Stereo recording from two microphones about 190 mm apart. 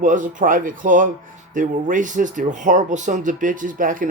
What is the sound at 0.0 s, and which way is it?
Speech, 45° right (ahead or behind).